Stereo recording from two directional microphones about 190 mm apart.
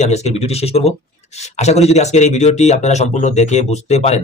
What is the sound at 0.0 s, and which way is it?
Speech, 35° left (ahead or behind).